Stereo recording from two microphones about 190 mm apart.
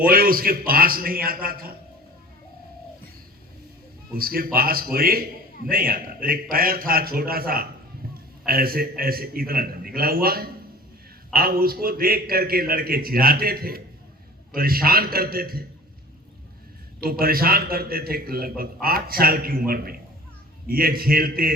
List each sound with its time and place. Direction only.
0.0 s a man's voice: 50° right (ahead or behind)
4.1 s a man's voice: 50° right (ahead or behind)
8.0 s a sound: 50° right (ahead or behind)
8.4 s a man's voice: 50° right (ahead or behind)
17.0 s a man's voice: 50° right (ahead or behind)